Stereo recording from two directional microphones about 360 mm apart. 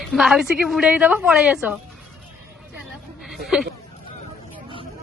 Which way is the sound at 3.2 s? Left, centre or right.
Centre.